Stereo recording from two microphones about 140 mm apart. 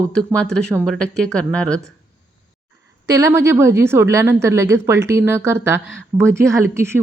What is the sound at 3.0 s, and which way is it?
A woman's voice, 20° right (ahead or behind).